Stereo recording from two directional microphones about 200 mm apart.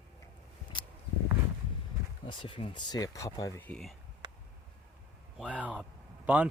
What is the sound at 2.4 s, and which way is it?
Speech, 25° left (ahead or behind).